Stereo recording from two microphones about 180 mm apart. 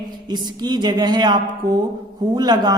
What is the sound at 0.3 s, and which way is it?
Speech, 25° right (ahead or behind).